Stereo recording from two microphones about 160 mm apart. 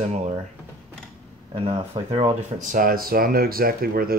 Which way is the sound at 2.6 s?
60° right (ahead or behind).